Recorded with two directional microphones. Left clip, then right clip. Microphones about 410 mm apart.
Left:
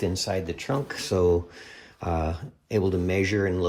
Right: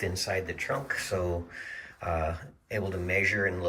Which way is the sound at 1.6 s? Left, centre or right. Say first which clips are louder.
Right 5 dB; centre.